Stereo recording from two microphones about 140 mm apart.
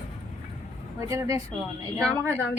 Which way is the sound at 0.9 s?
25° right (ahead or behind).